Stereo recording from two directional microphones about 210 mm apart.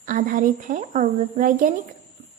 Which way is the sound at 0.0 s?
40° right (ahead or behind).